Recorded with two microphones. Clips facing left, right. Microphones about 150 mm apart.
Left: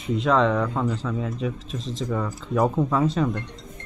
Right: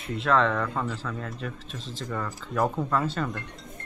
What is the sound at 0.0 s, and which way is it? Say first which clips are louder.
Speech: left 3 dB; centre (ahead or behind).